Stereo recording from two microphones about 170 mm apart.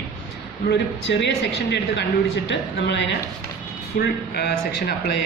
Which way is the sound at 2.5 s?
90° left.